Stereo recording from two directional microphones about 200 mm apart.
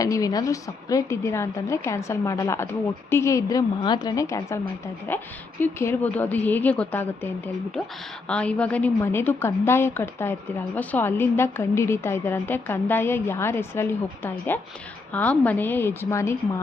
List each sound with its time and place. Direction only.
0.0 s a woman's voice: 15° left (ahead or behind)